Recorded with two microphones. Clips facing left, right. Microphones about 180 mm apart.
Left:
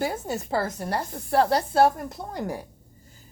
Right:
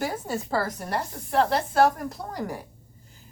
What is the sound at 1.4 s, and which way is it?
A woman's voice, 35° left (ahead or behind).